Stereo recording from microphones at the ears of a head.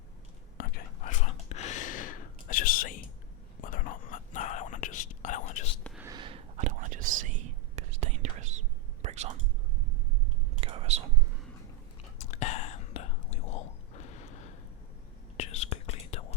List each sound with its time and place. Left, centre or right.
0.5 s whispering: left
6.1 s whispering: right
10.5 s whispering: right
12.2 s whispering: left